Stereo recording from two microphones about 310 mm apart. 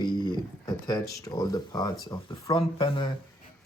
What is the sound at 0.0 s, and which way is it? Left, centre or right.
Speech, centre.